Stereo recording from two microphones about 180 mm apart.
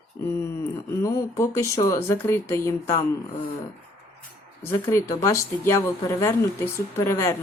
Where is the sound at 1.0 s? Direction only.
15° left (ahead or behind).